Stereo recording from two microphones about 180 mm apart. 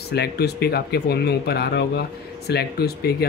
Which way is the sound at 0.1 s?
65° left (ahead or behind).